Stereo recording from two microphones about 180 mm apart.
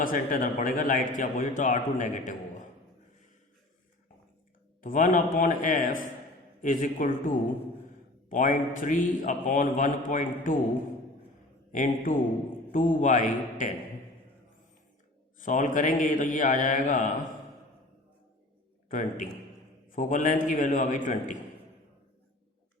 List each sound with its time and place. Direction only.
0.0 s a man's voice: 50° left (ahead or behind)
4.8 s a man's voice: 50° left (ahead or behind)
11.7 s a man's voice: 45° left (ahead or behind)
15.4 s a man's voice: 45° left (ahead or behind)
18.9 s a man's voice: 45° left (ahead or behind)